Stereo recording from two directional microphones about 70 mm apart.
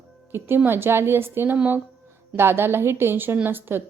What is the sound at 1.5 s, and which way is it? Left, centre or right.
Speech, right.